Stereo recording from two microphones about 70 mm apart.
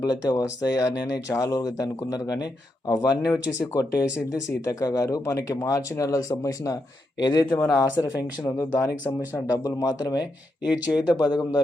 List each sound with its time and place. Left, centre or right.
0.0 s speech: left
3.3 s speech: left
3.8 s speech: left
7.2 s speech: left
7.7 s speech: left
8.5 s speech: left
9.1 s speech: left
9.6 s speech: left
10.7 s speech: left